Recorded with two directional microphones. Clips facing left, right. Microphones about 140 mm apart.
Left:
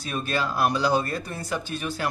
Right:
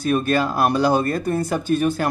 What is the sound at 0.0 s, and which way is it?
Speech, 55° right (ahead or behind).